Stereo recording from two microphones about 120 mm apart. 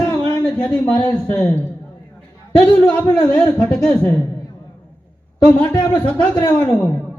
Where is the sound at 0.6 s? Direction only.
15° left (ahead or behind).